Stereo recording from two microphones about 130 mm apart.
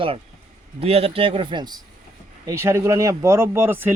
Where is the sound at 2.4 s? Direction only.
20° right (ahead or behind).